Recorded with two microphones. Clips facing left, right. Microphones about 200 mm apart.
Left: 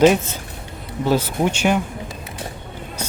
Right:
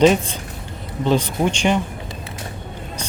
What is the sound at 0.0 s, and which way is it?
Speech, 5° left (ahead or behind).